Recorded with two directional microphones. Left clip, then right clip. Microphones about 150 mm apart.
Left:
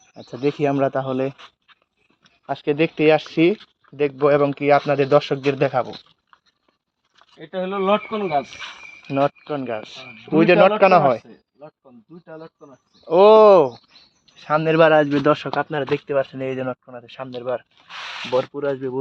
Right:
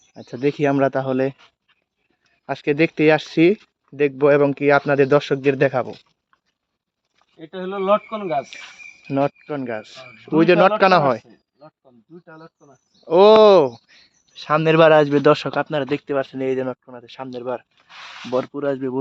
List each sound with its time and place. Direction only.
0.1 s speech: 60° right (ahead or behind)
2.5 s speech: 85° right
7.4 s speech: 15° right (ahead or behind)
9.0 s speech: 55° right (ahead or behind)
12.2 s speech: 5° left (ahead or behind)
13.1 s speech: 60° right (ahead or behind)
14.3 s speech: 80° right; by 17.7 s 30° right (ahead or behind)
17.8 s speech: 90° left
18.3 s speech: 45° right (ahead or behind)